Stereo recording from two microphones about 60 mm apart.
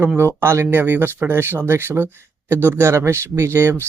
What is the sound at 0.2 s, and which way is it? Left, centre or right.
Speech, right.